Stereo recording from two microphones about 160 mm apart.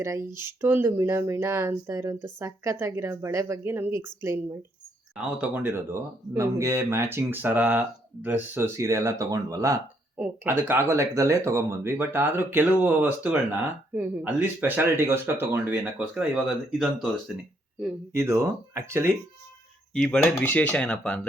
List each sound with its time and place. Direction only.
0.3 s speech: 15° right (ahead or behind)
18.1 s speech: 15° right (ahead or behind)
19.9 s speech: 5° left (ahead or behind)